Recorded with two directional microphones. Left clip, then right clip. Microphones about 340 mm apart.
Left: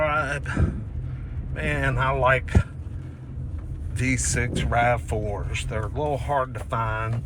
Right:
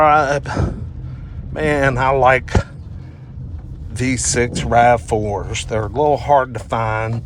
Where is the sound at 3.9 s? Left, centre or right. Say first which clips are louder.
Right 7 dB; centre.